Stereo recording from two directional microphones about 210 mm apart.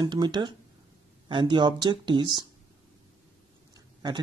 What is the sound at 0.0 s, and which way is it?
Speech, 20° right (ahead or behind).